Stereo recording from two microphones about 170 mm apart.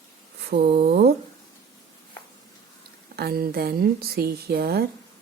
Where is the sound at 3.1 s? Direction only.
65° right (ahead or behind).